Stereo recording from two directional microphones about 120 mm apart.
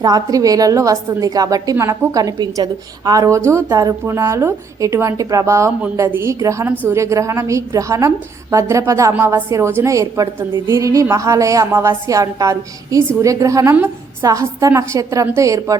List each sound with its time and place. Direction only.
0.0 s a woman's voice: 30° right (ahead or behind)
1.7 s a woman's voice: 20° right (ahead or behind)